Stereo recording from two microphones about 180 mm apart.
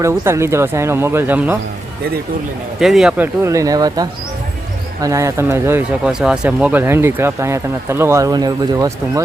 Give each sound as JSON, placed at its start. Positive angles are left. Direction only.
{"t": 0.0, "sound": "speech", "side_deg": -15}
{"t": 2.8, "sound": "speech", "side_deg": -5}
{"t": 3.4, "sound": "speech", "side_deg": -15}
{"t": 6.1, "sound": "speech", "side_deg": -5}